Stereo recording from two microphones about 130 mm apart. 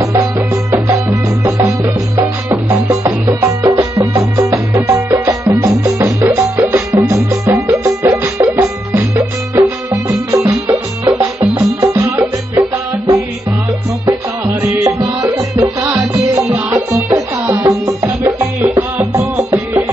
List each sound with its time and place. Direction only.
0.0 s music: 25° right (ahead or behind)
16.3 s music: 15° right (ahead or behind)